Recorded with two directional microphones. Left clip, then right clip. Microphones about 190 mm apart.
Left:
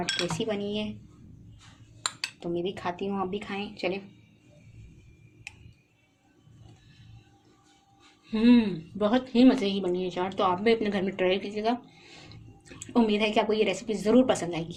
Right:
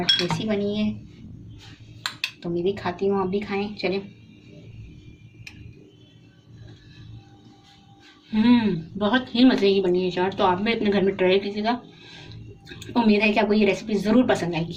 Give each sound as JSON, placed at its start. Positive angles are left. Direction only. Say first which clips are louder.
{"t": 0.2, "sound": "speech", "louder": "right 5 dB", "side_deg": 40}
{"t": 2.0, "sound": "speech", "louder": "right 4 dB", "side_deg": 40}
{"t": 8.3, "sound": "speech", "louder": "right 2 dB", "side_deg": 30}